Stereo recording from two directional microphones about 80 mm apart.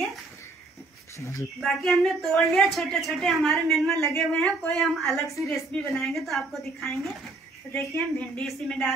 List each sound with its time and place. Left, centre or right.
1.1 s speech: left
1.6 s speech: centre
5.2 s a woman's voice: left
5.7 s speech: centre
7.7 s speech: centre
8.5 s speech: centre